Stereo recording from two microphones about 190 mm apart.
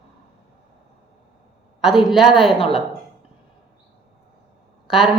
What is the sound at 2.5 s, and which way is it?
Speech, 30° left (ahead or behind).